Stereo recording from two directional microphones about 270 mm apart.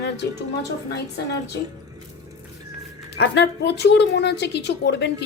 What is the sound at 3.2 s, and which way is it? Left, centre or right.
A woman's voice, left.